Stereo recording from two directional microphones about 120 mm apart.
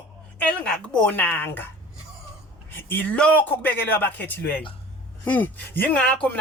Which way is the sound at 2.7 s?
20° left (ahead or behind).